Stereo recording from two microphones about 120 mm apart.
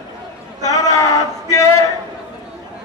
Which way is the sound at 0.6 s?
30° left (ahead or behind).